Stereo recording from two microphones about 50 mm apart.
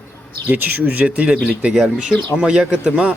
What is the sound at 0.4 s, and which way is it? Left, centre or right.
Speech, right.